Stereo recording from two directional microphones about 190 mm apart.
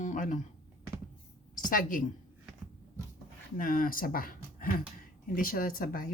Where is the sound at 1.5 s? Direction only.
45° left (ahead or behind).